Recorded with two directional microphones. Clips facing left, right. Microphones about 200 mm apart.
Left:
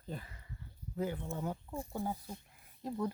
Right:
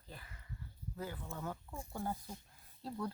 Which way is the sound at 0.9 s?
20° left (ahead or behind).